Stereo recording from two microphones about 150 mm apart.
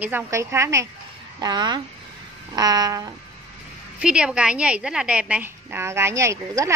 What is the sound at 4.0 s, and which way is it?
A woman's voice, 5° right (ahead or behind).